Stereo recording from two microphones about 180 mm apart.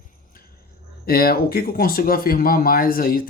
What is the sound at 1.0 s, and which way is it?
Speech, 55° left (ahead or behind).